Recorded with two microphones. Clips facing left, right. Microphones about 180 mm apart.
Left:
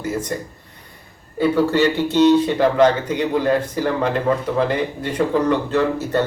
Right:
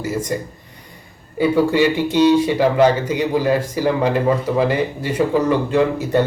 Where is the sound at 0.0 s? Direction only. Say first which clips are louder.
Right 2 dB; 10° right (ahead or behind).